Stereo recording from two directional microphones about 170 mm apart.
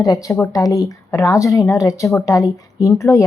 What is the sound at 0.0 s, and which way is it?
Speech, 20° left (ahead or behind).